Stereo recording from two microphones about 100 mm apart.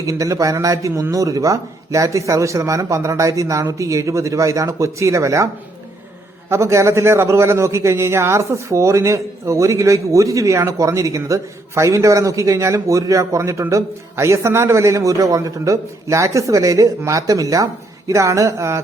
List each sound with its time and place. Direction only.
0.0 s a man's voice: 30° right (ahead or behind)
6.5 s a man's voice: 30° right (ahead or behind)